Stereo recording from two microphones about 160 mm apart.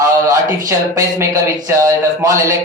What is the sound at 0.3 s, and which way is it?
Speech, 20° right (ahead or behind).